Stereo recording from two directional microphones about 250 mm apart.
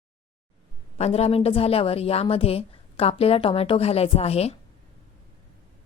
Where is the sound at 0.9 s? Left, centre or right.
Left.